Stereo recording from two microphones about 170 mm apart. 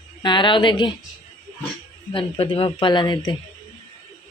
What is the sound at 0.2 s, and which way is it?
Speech, 25° left (ahead or behind).